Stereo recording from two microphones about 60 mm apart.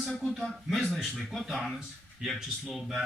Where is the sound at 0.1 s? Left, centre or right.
Centre.